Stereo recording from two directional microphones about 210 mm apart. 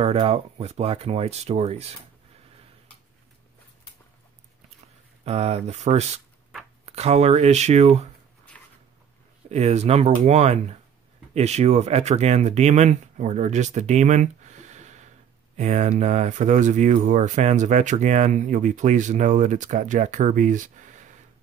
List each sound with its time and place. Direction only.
0.0 s speech: 30° right (ahead or behind)
5.2 s speech: 30° right (ahead or behind)
8.5 s a sound: 5° left (ahead or behind)
9.5 s speech: 30° right (ahead or behind)